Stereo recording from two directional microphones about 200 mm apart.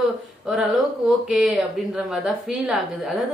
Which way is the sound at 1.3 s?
5° right (ahead or behind).